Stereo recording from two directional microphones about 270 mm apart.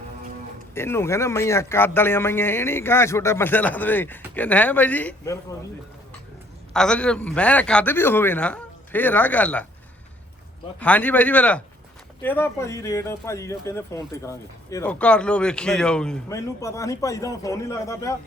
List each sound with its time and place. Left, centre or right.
0.7 s speech: centre
6.7 s a man's voice: centre
10.8 s a man's voice: centre